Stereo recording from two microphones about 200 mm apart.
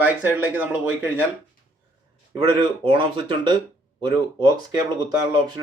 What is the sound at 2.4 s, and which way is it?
Speech, 25° right (ahead or behind).